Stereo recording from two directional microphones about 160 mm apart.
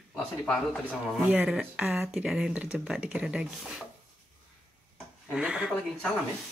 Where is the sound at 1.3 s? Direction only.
5° right (ahead or behind).